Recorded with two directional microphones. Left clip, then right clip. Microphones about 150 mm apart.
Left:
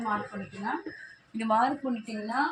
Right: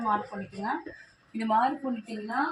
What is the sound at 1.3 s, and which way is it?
Speech, 15° left (ahead or behind).